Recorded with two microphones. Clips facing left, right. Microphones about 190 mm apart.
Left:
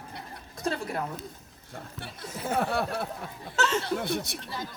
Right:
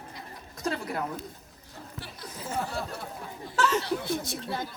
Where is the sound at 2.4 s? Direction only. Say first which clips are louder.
Left 5 dB; 65° left (ahead or behind).